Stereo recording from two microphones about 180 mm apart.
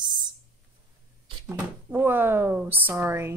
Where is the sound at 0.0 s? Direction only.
25° right (ahead or behind).